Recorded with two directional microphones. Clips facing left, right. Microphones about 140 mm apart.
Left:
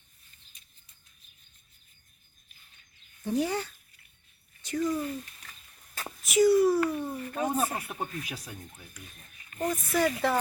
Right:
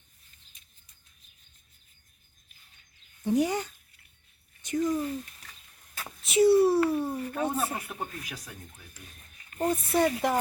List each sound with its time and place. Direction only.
3.2 s speech: 15° right (ahead or behind)
6.2 s speech: 30° right (ahead or behind)
7.5 s speech: 25° left (ahead or behind)
7.9 s speech: 5° left (ahead or behind)
9.6 s speech: 30° right (ahead or behind)